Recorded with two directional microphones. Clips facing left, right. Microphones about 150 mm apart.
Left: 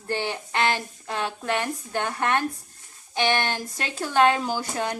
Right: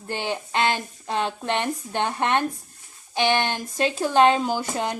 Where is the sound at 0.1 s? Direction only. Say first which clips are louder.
Right 1 dB; 15° right (ahead or behind).